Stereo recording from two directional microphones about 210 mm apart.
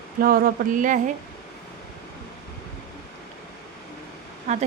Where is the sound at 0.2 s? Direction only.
45° right (ahead or behind).